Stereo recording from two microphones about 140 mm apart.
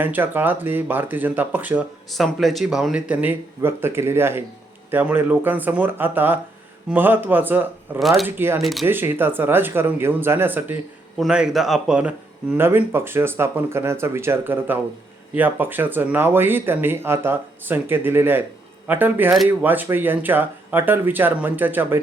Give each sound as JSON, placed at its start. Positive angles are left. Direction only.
{"t": 0.0, "sound": "speech", "side_deg": -15}
{"t": 2.1, "sound": "speech", "side_deg": 0}
{"t": 7.9, "sound": "speech", "side_deg": 0}
{"t": 8.4, "sound": "speech", "side_deg": -20}
{"t": 8.6, "sound": "speech", "side_deg": 0}
{"t": 8.9, "sound": "speech", "side_deg": -15}